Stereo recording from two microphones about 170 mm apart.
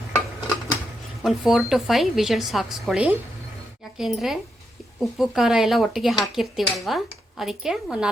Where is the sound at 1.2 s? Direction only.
Centre (ahead or behind).